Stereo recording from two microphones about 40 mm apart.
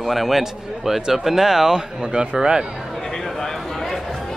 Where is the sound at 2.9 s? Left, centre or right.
Centre.